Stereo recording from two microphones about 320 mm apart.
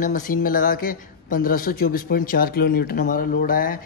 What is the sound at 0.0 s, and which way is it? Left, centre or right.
Speech, left.